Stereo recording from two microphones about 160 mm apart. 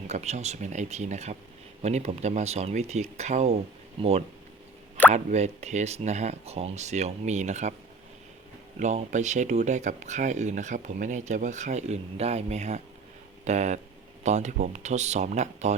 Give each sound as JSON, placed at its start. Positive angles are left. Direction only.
{"t": 0.1, "sound": "speech", "side_deg": -45}
{"t": 5.1, "sound": "speech", "side_deg": -45}
{"t": 8.8, "sound": "speech", "side_deg": -45}